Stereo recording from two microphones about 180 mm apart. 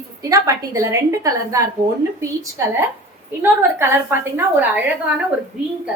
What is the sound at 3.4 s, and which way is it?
A woman's voice, 15° right (ahead or behind).